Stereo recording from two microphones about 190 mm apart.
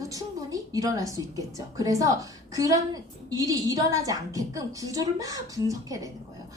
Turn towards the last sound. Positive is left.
turn(degrees=-15)  # may be behind; listen again after turning